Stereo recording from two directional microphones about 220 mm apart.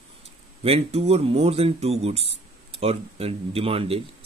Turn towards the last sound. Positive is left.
turn(degrees=-25)  # may be behind; listen again after turning